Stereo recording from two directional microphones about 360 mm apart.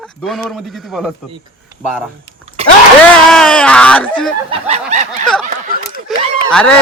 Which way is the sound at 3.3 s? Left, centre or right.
Centre.